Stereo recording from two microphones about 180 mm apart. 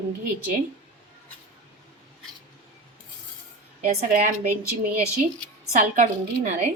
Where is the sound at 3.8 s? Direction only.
45° right (ahead or behind).